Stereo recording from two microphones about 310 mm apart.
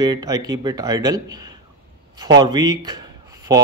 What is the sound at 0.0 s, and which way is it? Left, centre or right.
A man's voice, centre.